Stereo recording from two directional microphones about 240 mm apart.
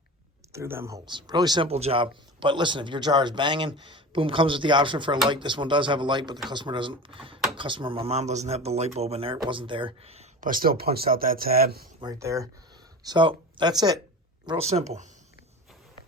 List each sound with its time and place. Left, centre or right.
0.5 s speech: centre; by 11.9 s right
11.9 s speech: centre